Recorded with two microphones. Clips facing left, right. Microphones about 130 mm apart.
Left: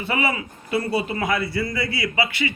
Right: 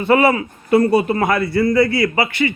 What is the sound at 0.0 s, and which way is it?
A man's voice, 55° right (ahead or behind).